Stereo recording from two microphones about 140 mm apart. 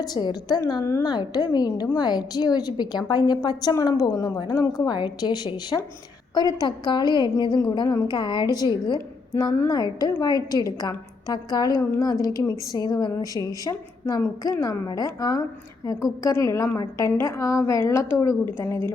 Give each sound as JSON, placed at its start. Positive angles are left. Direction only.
{"t": 0.1, "sound": "a woman's voice", "side_deg": 30}